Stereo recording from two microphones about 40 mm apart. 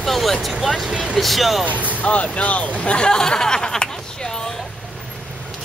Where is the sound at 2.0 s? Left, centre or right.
Left.